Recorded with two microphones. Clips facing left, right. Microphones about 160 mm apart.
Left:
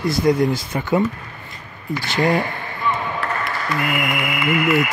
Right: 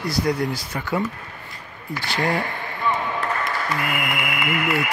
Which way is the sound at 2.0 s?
20° left (ahead or behind).